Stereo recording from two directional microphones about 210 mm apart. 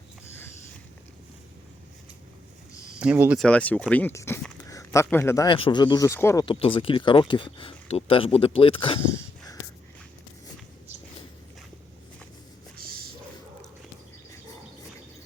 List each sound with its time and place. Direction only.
3.0 s speech: 5° right (ahead or behind)
3.4 s a man's voice: 5° left (ahead or behind); by 9.0 s 25° left (ahead or behind)
12.7 s a sound: 45° right (ahead or behind)